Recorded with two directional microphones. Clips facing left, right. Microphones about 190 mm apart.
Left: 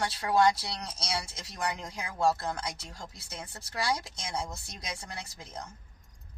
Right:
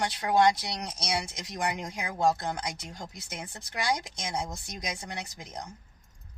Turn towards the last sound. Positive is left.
turn(degrees=-20)  # may be behind; listen again after turning